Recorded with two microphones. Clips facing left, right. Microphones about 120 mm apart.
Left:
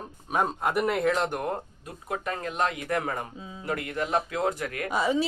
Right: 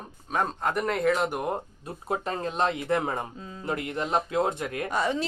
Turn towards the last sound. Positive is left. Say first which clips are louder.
# left 2 dB
turn(degrees=5)  # may be behind; listen again after turning